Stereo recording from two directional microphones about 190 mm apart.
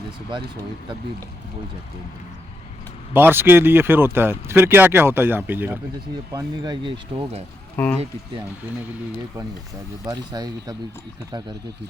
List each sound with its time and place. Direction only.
3.1 s speech: 10° right (ahead or behind)
7.8 s speech: 10° left (ahead or behind)
10.1 s speech: 20° right (ahead or behind)